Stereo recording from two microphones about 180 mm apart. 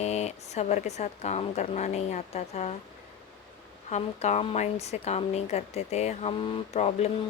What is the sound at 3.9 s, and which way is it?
A woman's voice, 40° left (ahead or behind).